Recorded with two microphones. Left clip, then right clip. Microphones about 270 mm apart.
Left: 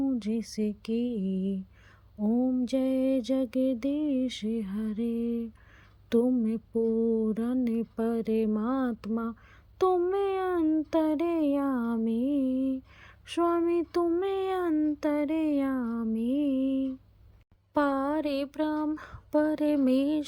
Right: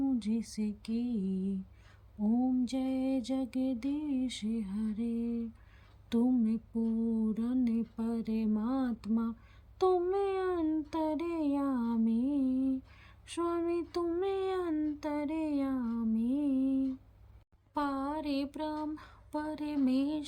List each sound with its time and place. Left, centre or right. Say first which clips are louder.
0.2 s child singing: left 5 dB; centre
2.6 s child singing: left 7 dB; centre